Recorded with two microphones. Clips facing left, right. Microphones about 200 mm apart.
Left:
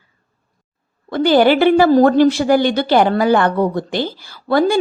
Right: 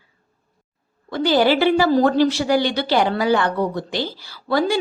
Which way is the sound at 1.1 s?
55° left (ahead or behind).